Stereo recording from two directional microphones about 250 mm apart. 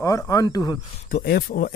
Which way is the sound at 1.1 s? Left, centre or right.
Left.